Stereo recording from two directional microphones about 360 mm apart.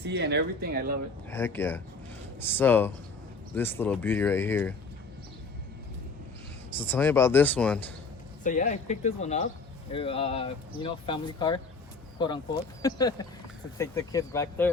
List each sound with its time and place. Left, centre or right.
0.0 s speech: right
1.3 s speech: centre
6.7 s speech: centre
8.4 s speech: left